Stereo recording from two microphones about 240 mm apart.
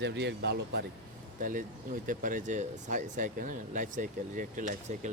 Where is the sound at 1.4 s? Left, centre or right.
Right.